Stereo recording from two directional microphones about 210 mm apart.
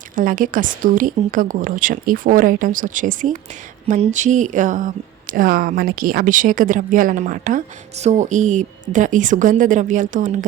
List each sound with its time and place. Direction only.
0.2 s speech: 40° right (ahead or behind)